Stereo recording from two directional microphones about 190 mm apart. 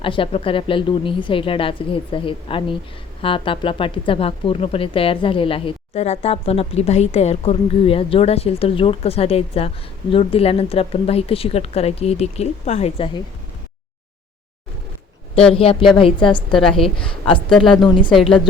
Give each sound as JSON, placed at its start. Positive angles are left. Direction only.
{"t": 0.0, "sound": "a woman's voice", "side_deg": 25}
{"t": 15.5, "sound": "a woman's voice", "side_deg": 30}
{"t": 16.7, "sound": "a woman's voice", "side_deg": 0}
{"t": 17.6, "sound": "a woman's voice", "side_deg": 25}